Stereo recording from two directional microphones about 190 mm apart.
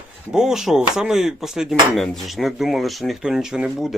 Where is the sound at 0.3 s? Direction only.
5° right (ahead or behind).